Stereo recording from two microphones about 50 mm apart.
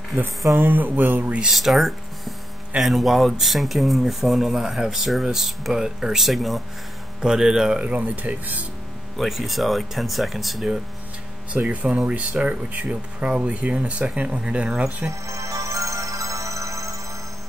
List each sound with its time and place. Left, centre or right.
0.6 s a sound: right
1.5 s speech: centre
7.2 s speech: centre
7.8 s speech: right
9.1 s speech: centre
11.5 s speech: right
15.0 s music: right